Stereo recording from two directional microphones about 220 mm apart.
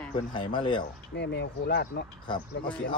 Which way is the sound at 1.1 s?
50° left (ahead or behind).